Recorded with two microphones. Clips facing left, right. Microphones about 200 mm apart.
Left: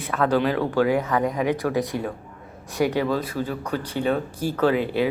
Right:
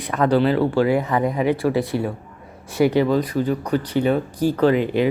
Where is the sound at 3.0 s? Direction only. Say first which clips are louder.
Right 5 dB; 15° right (ahead or behind).